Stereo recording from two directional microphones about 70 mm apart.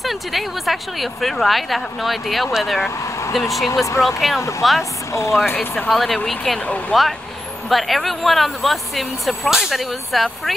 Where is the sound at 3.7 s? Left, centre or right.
Left.